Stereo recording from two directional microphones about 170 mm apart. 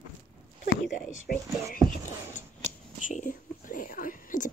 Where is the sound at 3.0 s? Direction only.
50° left (ahead or behind).